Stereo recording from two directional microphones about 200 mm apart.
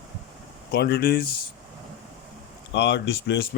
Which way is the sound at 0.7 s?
55° left (ahead or behind).